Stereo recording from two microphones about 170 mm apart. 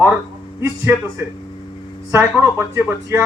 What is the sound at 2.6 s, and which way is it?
Speech, 15° right (ahead or behind).